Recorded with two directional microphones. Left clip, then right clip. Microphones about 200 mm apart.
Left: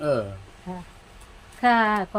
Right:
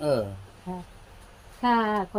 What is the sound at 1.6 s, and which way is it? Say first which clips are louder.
Speech: left 4 dB; 45° left (ahead or behind).